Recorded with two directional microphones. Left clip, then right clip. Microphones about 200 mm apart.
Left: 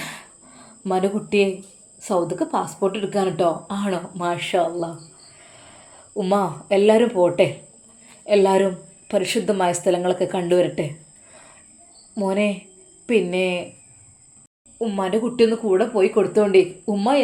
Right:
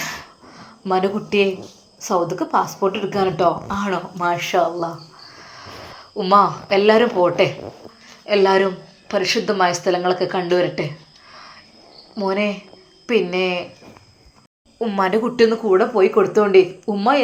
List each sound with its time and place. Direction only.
0.0 s a sound: 20° left (ahead or behind)
2.0 s speech: 20° left (ahead or behind)
6.1 s speech: 25° left (ahead or behind)
9.0 s speech: 25° left (ahead or behind)
12.1 s speech: 25° left (ahead or behind)
14.8 s speech: 5° left (ahead or behind); by 17.2 s 25° left (ahead or behind)